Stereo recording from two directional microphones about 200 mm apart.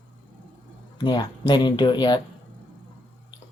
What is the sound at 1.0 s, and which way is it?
Speech, 20° left (ahead or behind).